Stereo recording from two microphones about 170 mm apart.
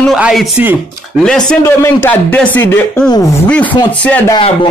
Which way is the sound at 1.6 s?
15° left (ahead or behind).